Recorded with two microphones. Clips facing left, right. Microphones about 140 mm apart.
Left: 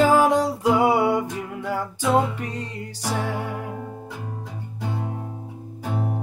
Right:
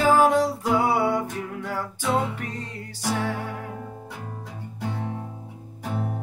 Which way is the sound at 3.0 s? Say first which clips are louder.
Right 1 dB; 15° left (ahead or behind).